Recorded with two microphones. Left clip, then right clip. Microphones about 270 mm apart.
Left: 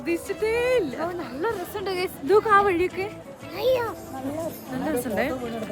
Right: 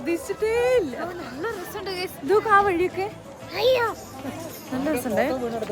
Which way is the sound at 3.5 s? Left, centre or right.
Right.